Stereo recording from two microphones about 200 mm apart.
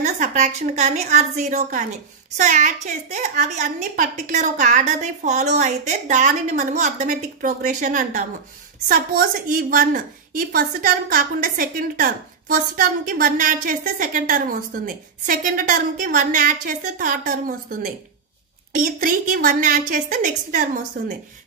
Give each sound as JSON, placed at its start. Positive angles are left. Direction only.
{"t": 0.0, "sound": "a child's voice", "side_deg": -35}